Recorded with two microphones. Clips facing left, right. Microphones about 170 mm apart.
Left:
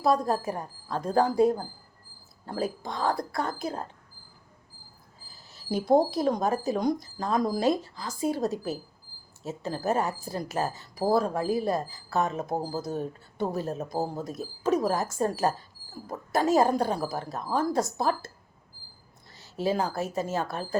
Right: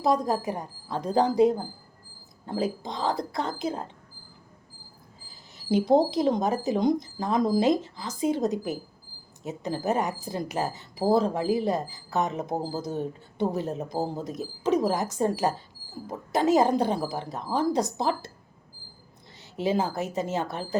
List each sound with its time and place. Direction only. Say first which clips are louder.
0.0 s speech: even; 20° right (ahead or behind)
5.7 s speech: right 2 dB; 20° right (ahead or behind)
19.4 s speech: right 1 dB; 20° right (ahead or behind)